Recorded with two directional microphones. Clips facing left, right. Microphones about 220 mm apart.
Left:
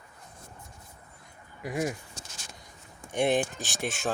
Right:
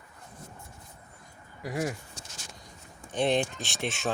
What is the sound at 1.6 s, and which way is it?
Speech, 20° left (ahead or behind).